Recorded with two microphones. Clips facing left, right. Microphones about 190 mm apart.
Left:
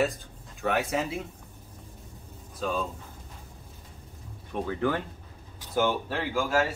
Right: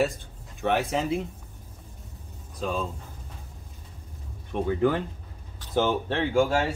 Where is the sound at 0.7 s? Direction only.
Centre (ahead or behind).